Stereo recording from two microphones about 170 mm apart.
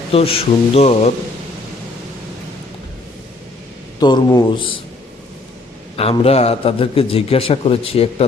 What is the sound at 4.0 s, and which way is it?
Speech, 25° left (ahead or behind).